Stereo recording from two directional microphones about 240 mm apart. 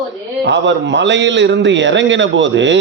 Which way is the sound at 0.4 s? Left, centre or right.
Right.